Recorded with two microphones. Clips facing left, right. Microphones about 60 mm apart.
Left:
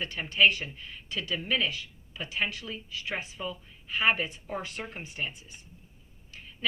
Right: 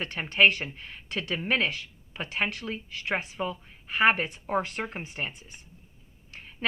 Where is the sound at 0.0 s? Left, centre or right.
Right.